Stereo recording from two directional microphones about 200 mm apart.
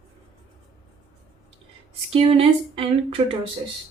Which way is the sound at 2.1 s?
30° right (ahead or behind).